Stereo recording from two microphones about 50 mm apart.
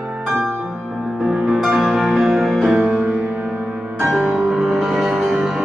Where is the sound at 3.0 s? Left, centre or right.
Right.